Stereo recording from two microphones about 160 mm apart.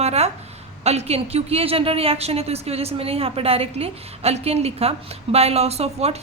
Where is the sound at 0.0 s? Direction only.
40° right (ahead or behind).